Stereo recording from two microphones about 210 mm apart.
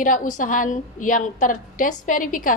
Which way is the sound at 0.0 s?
40° left (ahead or behind).